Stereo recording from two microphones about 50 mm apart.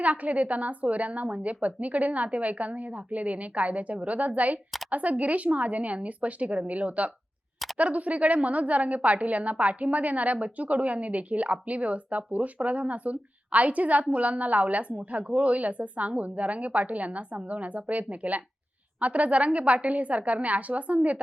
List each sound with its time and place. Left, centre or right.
0.0 s a woman's voice: right